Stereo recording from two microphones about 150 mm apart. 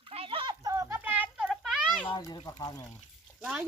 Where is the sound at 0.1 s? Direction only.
40° right (ahead or behind); by 2.0 s 5° right (ahead or behind).